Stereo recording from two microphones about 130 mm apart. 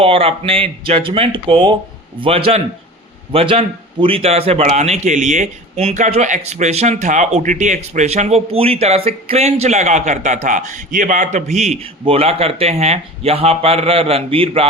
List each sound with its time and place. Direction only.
0.0 s a man's voice: 45° right (ahead or behind)